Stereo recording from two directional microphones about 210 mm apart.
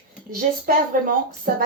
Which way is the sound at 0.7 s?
40° right (ahead or behind).